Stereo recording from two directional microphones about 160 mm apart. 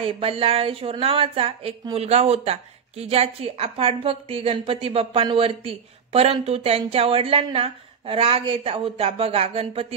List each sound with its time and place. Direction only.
0.0 s a woman's voice: 35° right (ahead or behind)